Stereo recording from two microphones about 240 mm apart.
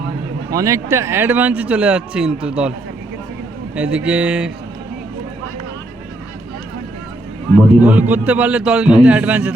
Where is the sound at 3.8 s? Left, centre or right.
Centre.